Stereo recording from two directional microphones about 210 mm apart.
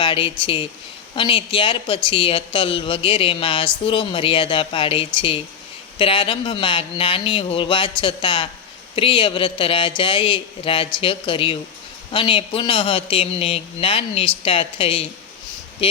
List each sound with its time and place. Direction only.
0.0 s speech: 25° left (ahead or behind)